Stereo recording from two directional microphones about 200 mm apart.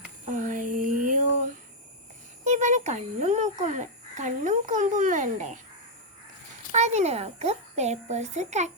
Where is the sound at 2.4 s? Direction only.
35° right (ahead or behind).